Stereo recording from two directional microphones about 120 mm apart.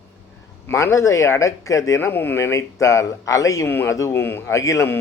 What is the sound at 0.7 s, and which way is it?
Speech, 25° left (ahead or behind).